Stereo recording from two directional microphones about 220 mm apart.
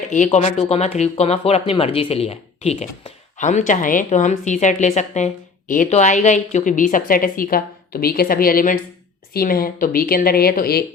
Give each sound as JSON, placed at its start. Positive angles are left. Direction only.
{"t": 0.1, "sound": "speech", "side_deg": 35}